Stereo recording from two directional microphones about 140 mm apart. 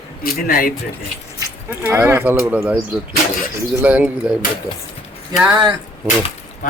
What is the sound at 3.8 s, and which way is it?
Speech, 10° right (ahead or behind).